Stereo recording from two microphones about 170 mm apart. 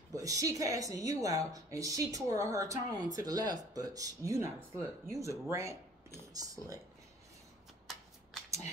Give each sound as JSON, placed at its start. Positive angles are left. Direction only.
{"t": 0.1, "sound": "a woman's voice", "side_deg": -20}
{"t": 7.9, "sound": "shuffling cards", "side_deg": 0}